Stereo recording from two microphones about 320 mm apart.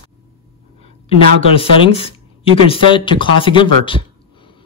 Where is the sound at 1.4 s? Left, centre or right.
Centre.